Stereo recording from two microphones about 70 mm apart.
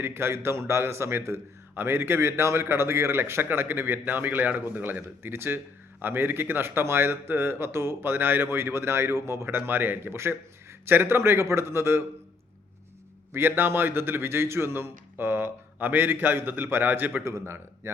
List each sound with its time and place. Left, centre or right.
0.0 s speech: right
13.3 s speech: right
17.2 s speech: right